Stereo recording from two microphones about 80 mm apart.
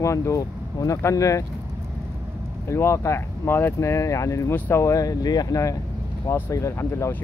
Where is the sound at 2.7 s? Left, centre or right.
Left.